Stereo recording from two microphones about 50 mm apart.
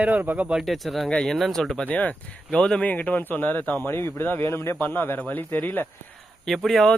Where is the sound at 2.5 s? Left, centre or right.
Centre.